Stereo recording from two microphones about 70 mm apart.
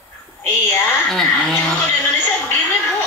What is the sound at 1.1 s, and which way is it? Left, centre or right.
Speech, centre.